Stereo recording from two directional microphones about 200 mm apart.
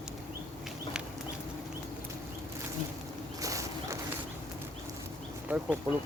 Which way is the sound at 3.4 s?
15° right (ahead or behind).